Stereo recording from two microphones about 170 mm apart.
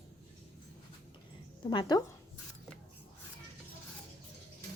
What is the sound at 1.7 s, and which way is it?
Music, 25° left (ahead or behind).